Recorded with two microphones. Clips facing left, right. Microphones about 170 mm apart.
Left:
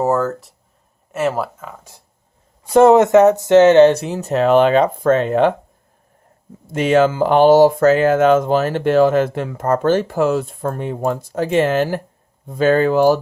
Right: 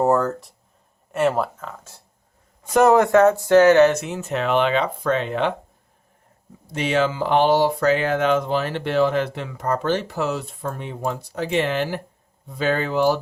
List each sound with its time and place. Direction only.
0.0 s speech: centre (ahead or behind)
2.6 s speech: 25° left (ahead or behind); by 5.5 s 45° left (ahead or behind)
6.7 s speech: 45° left (ahead or behind)